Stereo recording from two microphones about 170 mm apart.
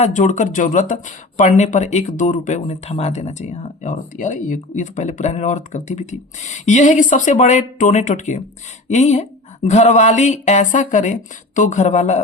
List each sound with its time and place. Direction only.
0.0 s speech: 45° left (ahead or behind)